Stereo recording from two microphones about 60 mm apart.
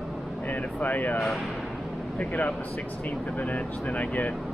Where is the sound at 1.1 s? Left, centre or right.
Centre.